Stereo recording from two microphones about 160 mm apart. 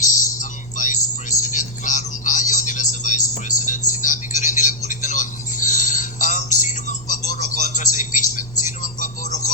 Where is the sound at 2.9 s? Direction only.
50° left (ahead or behind).